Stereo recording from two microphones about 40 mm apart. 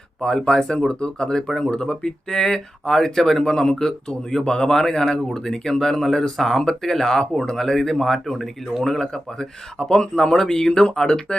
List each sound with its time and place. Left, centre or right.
0.2 s speech: centre